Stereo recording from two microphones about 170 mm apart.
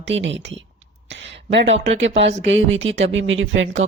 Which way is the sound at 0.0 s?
90° right.